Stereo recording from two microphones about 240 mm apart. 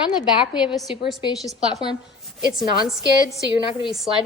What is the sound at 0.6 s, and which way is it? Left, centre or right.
Speech, centre.